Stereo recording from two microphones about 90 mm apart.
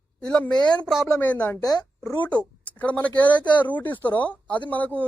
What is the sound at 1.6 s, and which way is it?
Speech, 45° left (ahead or behind).